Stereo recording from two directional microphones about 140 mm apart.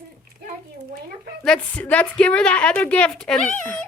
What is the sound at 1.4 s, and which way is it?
A woman's voice, 10° left (ahead or behind).